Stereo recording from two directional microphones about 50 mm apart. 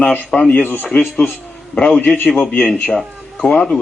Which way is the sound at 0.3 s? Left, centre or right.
Centre.